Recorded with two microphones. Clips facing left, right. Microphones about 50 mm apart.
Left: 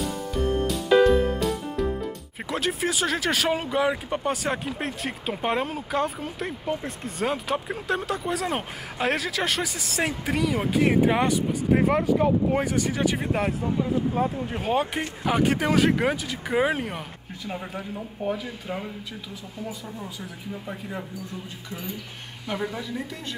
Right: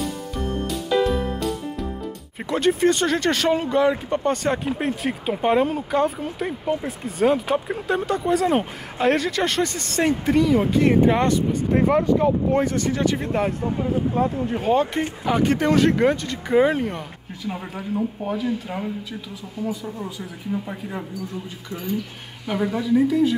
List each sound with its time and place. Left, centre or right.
0.4 s music: centre
2.5 s speech: centre
22.5 s speech: centre